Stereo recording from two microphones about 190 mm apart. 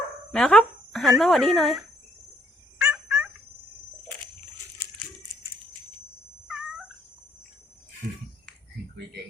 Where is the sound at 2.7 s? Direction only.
10° right (ahead or behind).